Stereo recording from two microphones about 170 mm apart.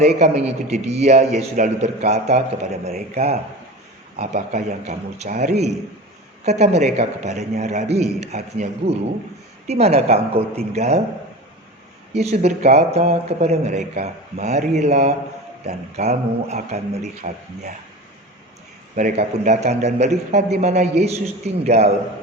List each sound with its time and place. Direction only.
0.0 s a man's voice: 40° right (ahead or behind)
9.6 s speech: 40° right (ahead or behind)
12.1 s a man's voice: 40° right (ahead or behind)
18.9 s a man's voice: 50° right (ahead or behind)